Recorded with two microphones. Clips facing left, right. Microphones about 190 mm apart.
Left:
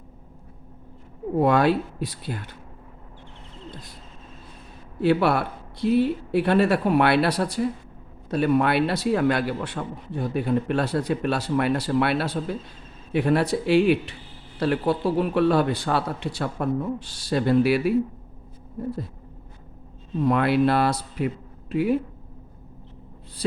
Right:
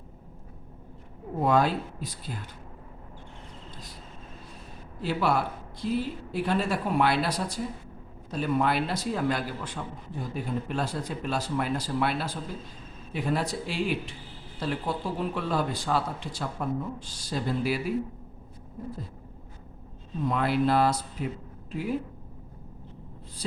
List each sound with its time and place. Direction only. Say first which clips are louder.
1.4 s a man's voice: left 5 dB; 70° left (ahead or behind)
4.9 s a man's voice: left 6 dB; 65° left (ahead or behind)
20.2 s a man's voice: left 5 dB; 70° left (ahead or behind)